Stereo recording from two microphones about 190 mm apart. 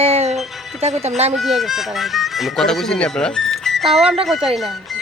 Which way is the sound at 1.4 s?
Centre (ahead or behind).